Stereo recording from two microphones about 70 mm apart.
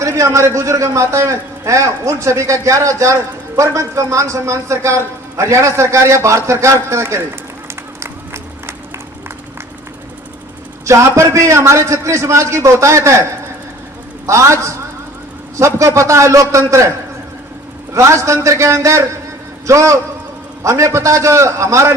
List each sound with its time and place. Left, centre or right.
0.0 s a man's voice: right
7.9 s run: right
10.8 s a man's voice: right
14.3 s a man's voice: right
17.9 s a man's voice: right